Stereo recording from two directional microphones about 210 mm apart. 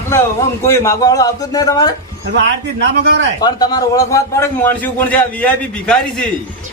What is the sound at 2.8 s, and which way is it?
Speech, 55° right (ahead or behind).